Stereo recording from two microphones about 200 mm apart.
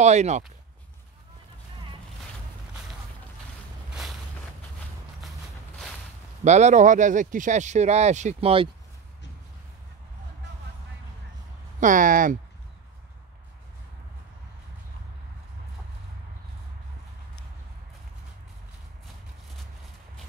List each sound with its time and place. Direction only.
0.0 s speech: 35° right (ahead or behind)
6.4 s speech: 35° right (ahead or behind)
11.8 s speech: 40° right (ahead or behind)